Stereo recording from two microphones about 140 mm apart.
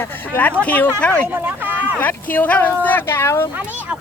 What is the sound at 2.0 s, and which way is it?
Speech, 15° left (ahead or behind).